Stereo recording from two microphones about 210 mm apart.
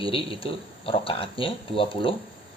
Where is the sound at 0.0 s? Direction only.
25° left (ahead or behind).